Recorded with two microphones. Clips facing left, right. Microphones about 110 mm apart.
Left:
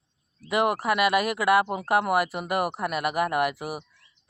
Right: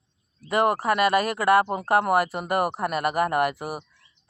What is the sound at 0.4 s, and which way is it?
Speech, 40° right (ahead or behind).